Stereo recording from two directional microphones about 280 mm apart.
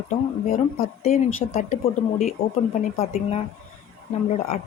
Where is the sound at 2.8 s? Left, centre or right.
Left.